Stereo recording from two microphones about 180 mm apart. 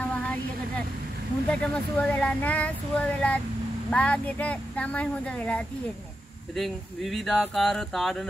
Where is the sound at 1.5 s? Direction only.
5° left (ahead or behind).